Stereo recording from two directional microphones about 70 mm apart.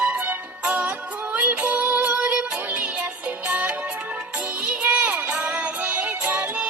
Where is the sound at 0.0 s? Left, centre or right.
Right.